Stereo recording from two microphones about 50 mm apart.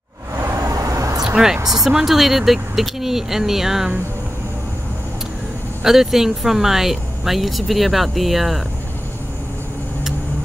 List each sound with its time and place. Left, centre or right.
0.4 s vehicle: right
1.2 s speech: centre
5.9 s speech: centre